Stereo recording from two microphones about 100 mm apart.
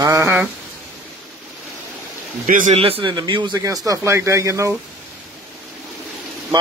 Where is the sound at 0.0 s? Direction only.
30° right (ahead or behind).